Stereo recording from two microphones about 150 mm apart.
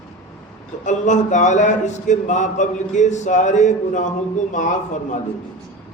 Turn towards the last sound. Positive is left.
turn(degrees=55)  # may be behind; listen again after turning